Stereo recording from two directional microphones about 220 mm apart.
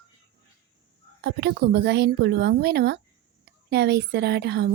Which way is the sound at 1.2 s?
50° right (ahead or behind).